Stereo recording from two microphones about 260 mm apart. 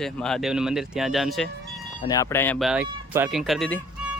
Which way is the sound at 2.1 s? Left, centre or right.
Centre.